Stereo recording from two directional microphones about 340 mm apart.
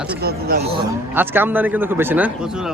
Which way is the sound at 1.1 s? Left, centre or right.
Centre.